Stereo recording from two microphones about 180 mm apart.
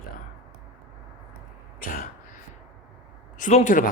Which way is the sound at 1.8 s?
50° left (ahead or behind).